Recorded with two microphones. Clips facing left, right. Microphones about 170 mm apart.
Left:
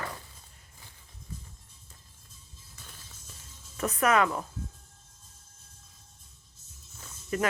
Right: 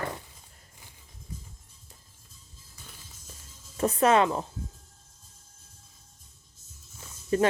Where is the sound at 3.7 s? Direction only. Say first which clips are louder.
Right 3 dB; 30° right (ahead or behind).